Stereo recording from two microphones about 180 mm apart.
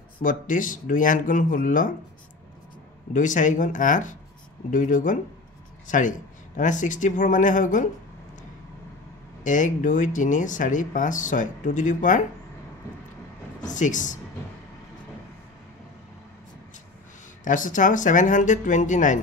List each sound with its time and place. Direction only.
0.2 s speech: 45° left (ahead or behind)
3.1 s speech: 45° left (ahead or behind)
9.4 s speech: 45° left (ahead or behind)
13.7 s speech: 45° left (ahead or behind)
17.5 s speech: 45° left (ahead or behind)